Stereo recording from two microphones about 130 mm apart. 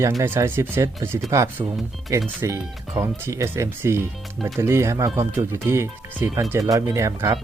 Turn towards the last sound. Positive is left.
turn(degrees=-25)  # may be behind; listen again after turning